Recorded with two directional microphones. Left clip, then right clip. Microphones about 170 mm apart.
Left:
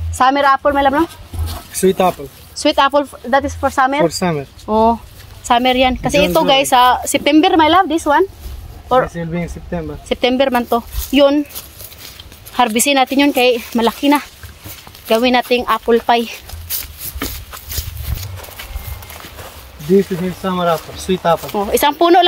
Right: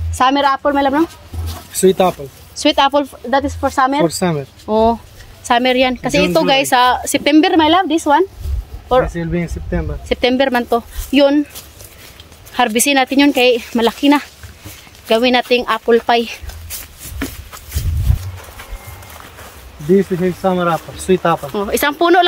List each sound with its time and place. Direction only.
0.1 s speech: 10° right (ahead or behind)
1.0 s a sound: 30° left (ahead or behind)
1.7 s speech: 10° right (ahead or behind)
12.5 s speech: 5° right (ahead or behind)
17.6 s a sound: 60° left (ahead or behind)
20.1 s speech: 75° left (ahead or behind)
20.4 s speech: 15° right (ahead or behind)